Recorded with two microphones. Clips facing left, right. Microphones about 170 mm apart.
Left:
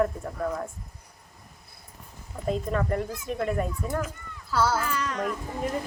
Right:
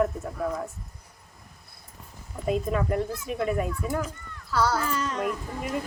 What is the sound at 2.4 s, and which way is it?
A child's voice, 10° right (ahead or behind).